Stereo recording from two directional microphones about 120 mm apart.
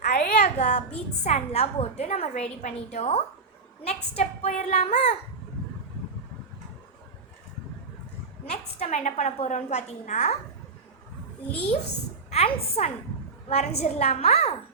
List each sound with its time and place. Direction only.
0.0 s a sound: 75° left (ahead or behind)
1.2 s a woman's voice: 65° left (ahead or behind)
8.4 s a woman's voice: 80° left
12.3 s a woman's voice: 60° left (ahead or behind)